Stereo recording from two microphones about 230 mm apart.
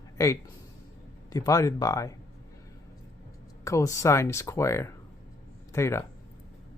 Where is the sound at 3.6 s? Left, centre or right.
Centre.